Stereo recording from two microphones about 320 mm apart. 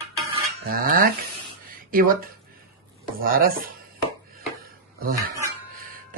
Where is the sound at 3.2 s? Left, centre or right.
Right.